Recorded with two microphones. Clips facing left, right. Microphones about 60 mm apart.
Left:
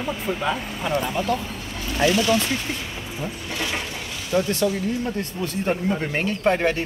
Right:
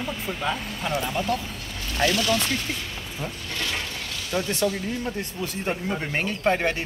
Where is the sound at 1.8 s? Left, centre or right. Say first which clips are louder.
Left 3 dB; centre.